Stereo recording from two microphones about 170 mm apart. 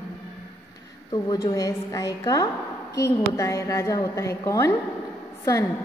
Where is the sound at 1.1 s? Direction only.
20° left (ahead or behind).